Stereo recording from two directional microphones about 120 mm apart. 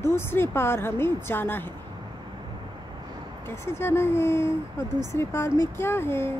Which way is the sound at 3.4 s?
20° left (ahead or behind).